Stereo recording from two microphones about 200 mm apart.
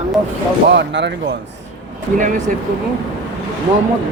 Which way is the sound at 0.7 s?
60° right (ahead or behind).